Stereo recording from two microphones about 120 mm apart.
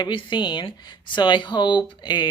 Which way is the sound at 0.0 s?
40° left (ahead or behind).